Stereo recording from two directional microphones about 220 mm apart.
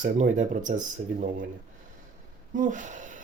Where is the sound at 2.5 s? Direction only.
35° right (ahead or behind).